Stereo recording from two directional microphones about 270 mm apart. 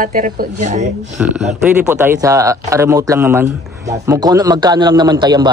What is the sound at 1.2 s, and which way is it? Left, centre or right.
A man's voice, centre.